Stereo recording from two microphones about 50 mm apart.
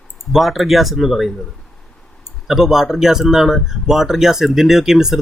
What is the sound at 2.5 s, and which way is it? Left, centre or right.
Speech, centre.